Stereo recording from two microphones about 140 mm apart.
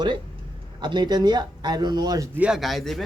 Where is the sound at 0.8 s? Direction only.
30° right (ahead or behind).